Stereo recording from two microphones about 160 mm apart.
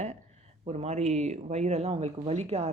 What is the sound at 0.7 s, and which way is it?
Speech, 40° right (ahead or behind).